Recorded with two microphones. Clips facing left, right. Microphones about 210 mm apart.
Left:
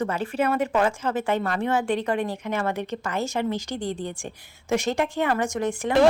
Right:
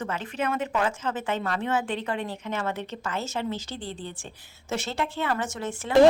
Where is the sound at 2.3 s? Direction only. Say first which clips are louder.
Left 4 dB; 10° left (ahead or behind).